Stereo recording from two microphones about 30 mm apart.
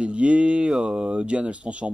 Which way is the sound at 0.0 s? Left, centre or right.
Right.